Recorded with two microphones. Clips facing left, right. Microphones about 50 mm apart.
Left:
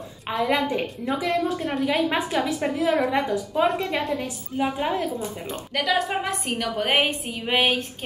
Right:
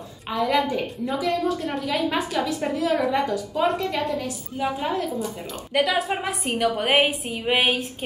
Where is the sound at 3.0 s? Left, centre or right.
Centre.